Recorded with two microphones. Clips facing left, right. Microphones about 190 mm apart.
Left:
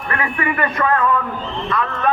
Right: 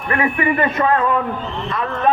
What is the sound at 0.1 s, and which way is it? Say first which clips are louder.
A man's voice: right 4 dB; 25° right (ahead or behind).